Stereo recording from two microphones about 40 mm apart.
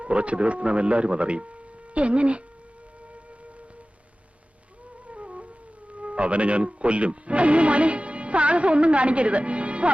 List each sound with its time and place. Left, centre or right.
0.0 s speech: right
5.0 s music: right
5.9 s speech: right